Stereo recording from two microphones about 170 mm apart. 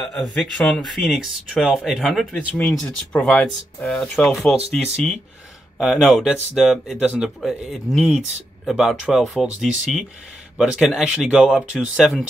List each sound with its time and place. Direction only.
0.0 s speech: 5° left (ahead or behind)
4.6 s speech: 35° right (ahead or behind)
5.8 s speech: centre (ahead or behind)